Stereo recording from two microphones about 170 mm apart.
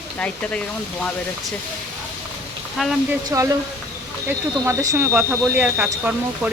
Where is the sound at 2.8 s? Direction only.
Centre (ahead or behind).